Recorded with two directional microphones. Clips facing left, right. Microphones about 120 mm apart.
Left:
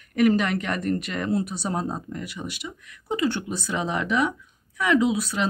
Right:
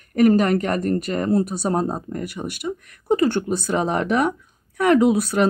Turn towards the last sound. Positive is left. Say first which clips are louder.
# right 6 dB
turn(degrees=-50)  # may be behind; listen again after turning